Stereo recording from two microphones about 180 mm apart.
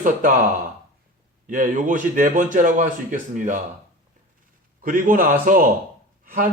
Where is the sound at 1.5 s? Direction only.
45° right (ahead or behind).